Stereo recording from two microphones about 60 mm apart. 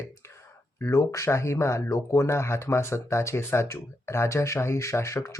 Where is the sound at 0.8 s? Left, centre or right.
Left.